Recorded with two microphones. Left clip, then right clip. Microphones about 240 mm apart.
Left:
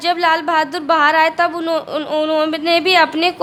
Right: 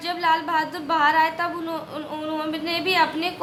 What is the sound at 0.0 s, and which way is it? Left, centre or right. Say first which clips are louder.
A woman's voice: left 7 dB; left.